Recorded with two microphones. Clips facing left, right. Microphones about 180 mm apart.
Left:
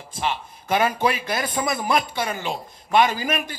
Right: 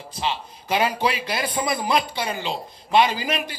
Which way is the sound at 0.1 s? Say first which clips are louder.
Left 1 dB; 50° left (ahead or behind).